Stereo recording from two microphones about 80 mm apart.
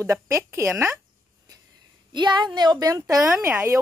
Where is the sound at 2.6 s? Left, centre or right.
Right.